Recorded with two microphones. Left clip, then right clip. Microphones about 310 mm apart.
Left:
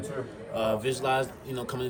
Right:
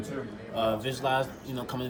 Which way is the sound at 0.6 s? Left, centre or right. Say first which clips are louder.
Left 1 dB; centre.